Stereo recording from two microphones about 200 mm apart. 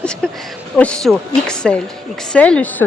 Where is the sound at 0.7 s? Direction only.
5° left (ahead or behind).